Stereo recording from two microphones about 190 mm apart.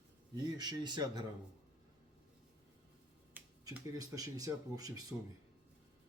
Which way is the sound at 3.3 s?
15° right (ahead or behind).